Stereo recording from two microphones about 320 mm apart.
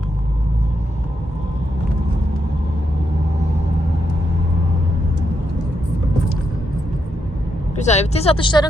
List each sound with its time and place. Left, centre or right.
7.8 s speech: left